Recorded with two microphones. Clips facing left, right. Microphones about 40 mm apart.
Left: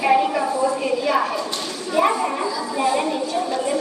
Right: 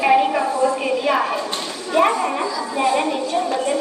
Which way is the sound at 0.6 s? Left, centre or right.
Right.